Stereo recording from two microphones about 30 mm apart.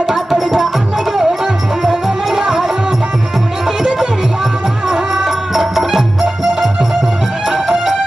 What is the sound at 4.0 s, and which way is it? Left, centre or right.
Music, centre.